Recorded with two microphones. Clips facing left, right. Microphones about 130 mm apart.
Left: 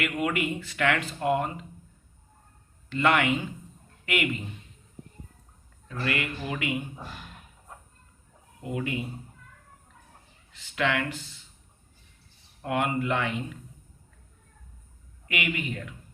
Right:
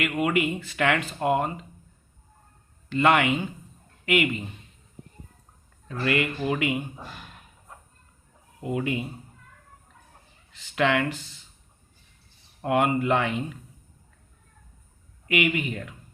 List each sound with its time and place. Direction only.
0.0 s speech: 15° right (ahead or behind)
3.0 s a man's voice: 15° right (ahead or behind)
5.9 s speech: 25° right (ahead or behind)
8.7 s speech: 25° right (ahead or behind)
10.8 s speech: 25° right (ahead or behind)
12.6 s speech: 25° right (ahead or behind)
15.3 s speech: 20° right (ahead or behind)